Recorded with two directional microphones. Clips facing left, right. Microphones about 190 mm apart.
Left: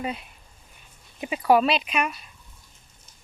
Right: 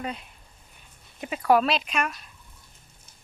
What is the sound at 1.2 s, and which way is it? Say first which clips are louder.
Speech: left 2 dB; 5° left (ahead or behind).